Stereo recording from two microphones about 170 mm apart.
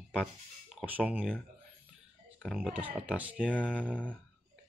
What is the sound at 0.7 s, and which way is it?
Speech, 10° right (ahead or behind).